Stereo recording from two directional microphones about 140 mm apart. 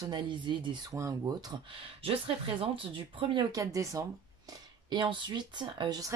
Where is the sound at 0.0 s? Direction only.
35° right (ahead or behind).